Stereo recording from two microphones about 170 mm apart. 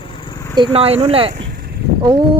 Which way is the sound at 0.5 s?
30° right (ahead or behind).